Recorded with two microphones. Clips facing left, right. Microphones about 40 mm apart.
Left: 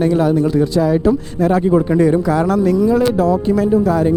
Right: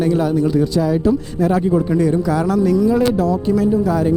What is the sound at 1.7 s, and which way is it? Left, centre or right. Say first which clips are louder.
Speech: left 3 dB; left.